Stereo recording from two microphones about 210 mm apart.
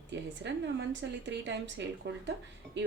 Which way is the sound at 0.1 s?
55° right (ahead or behind).